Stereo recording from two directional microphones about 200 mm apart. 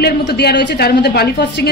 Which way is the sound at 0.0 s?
50° left (ahead or behind).